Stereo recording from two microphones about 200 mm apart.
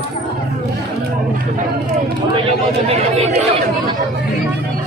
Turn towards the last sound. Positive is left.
turn(degrees=-30)  # may be behind; listen again after turning